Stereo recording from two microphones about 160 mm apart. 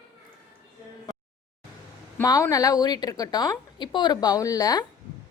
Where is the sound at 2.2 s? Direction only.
20° left (ahead or behind).